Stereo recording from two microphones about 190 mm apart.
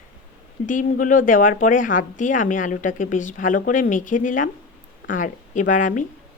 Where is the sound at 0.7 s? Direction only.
45° left (ahead or behind).